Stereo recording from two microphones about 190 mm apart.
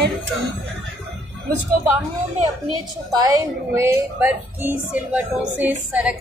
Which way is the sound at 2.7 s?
20° right (ahead or behind).